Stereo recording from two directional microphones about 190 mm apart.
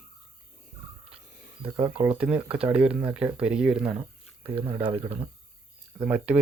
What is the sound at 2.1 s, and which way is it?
Speech, 5° right (ahead or behind).